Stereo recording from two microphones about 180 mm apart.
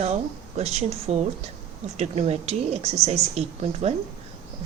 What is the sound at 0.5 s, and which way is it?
Speech, 35° right (ahead or behind).